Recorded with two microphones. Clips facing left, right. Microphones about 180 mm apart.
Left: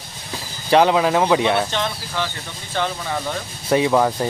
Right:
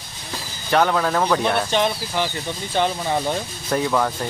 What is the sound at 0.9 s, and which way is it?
Speech, 10° left (ahead or behind).